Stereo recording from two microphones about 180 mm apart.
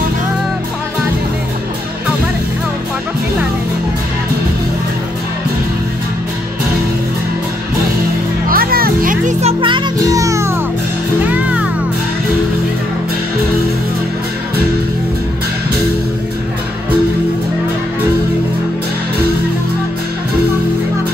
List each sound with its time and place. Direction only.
8.5 s music: 55° right (ahead or behind); by 11.6 s 10° right (ahead or behind)